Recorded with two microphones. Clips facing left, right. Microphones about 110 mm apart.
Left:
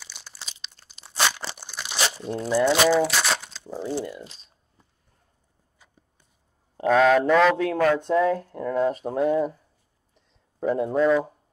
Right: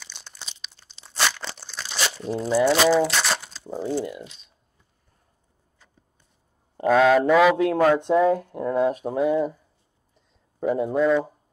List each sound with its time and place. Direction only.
0.0 s crumpling: 5° left (ahead or behind)
2.7 s speech: 5° left (ahead or behind)
6.8 s speech: centre (ahead or behind)
7.7 s speech: 20° right (ahead or behind); by 11.3 s centre (ahead or behind)